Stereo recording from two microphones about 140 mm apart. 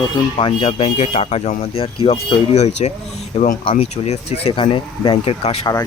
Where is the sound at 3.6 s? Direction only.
40° left (ahead or behind).